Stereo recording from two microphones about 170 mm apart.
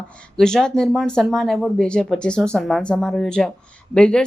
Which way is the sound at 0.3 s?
5° left (ahead or behind).